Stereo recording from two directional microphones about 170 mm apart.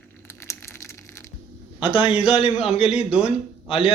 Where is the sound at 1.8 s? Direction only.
30° left (ahead or behind).